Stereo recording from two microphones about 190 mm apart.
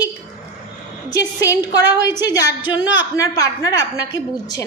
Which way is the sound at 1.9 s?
10° right (ahead or behind).